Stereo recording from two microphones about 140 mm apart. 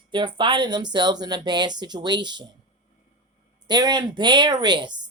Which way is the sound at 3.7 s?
30° right (ahead or behind).